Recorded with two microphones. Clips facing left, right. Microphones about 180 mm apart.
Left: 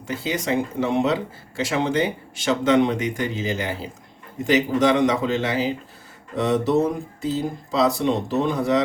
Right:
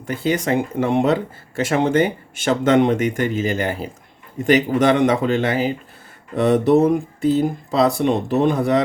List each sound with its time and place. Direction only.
0.1 s speech: 55° right (ahead or behind)